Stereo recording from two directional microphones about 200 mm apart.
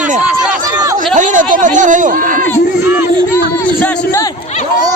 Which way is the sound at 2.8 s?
10° right (ahead or behind).